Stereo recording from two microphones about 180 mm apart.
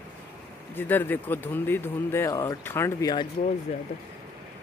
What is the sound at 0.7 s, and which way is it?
Speech, 10° left (ahead or behind).